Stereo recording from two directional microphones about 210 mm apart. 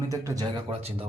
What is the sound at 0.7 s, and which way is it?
Speech, 30° right (ahead or behind).